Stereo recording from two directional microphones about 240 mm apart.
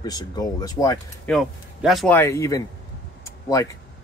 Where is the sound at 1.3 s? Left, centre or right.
Centre.